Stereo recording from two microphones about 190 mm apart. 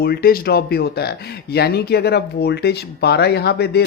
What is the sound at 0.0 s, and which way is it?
Speech, 55° left (ahead or behind).